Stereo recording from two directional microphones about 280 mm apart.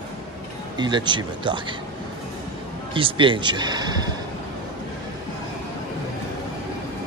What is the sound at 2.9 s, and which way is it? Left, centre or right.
Speech, centre.